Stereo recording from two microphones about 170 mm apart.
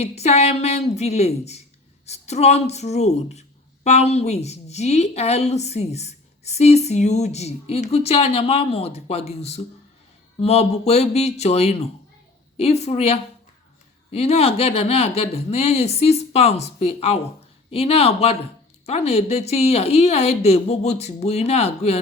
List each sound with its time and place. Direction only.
0.0 s a woman's voice: 40° left (ahead or behind)